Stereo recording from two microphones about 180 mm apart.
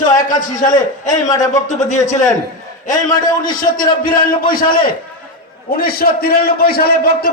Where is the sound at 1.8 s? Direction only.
40° left (ahead or behind).